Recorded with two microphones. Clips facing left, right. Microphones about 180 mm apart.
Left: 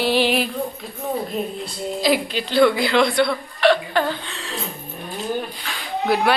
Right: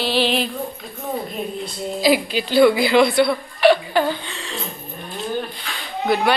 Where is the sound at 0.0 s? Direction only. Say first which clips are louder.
Left 1 dB; 10° left (ahead or behind).